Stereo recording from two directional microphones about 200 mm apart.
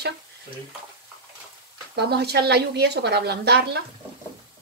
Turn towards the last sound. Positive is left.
turn(degrees=-55)  # may be behind; listen again after turning